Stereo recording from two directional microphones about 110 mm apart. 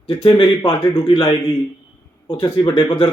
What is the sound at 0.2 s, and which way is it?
A man's voice, 45° left (ahead or behind).